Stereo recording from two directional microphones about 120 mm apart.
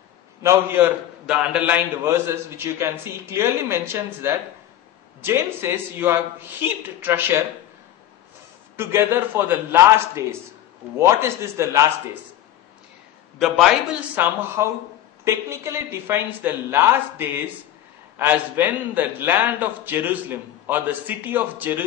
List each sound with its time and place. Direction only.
0.4 s a man's voice: 25° right (ahead or behind)
1.2 s a man's voice: 5° right (ahead or behind)
2.0 s a man's voice: 20° right (ahead or behind)
8.7 s a man's voice: 20° right (ahead or behind)
13.4 s a man's voice: 5° right (ahead or behind)
14.1 s a man's voice: 20° right (ahead or behind)